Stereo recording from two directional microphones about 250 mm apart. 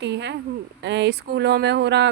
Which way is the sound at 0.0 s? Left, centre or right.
Right.